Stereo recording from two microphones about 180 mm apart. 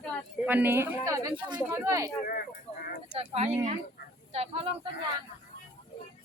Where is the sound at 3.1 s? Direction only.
35° right (ahead or behind).